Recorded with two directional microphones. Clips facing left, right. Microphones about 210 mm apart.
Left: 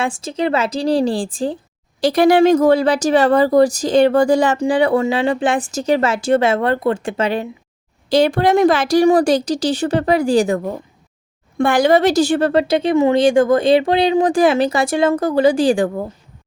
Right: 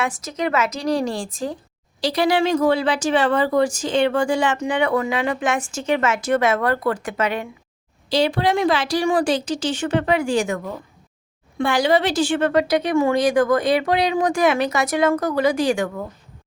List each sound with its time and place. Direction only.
0.0 s speech: 30° left (ahead or behind)
2.0 s speech: 50° left (ahead or behind); by 7.4 s 30° left (ahead or behind)
8.1 s speech: 50° left (ahead or behind); by 10.8 s 35° left (ahead or behind)
11.5 s speech: 50° left (ahead or behind); by 16.0 s 30° left (ahead or behind)